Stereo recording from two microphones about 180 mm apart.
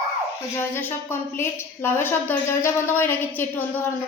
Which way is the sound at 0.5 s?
10° left (ahead or behind).